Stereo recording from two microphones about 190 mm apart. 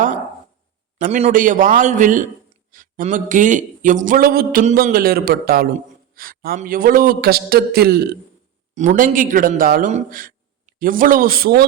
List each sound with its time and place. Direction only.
0.9 s a man's voice: 40° right (ahead or behind); by 8.2 s 55° right (ahead or behind)
8.7 s a man's voice: 40° right (ahead or behind)